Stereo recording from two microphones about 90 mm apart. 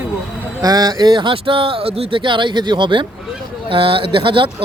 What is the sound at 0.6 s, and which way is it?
Speech, 45° right (ahead or behind).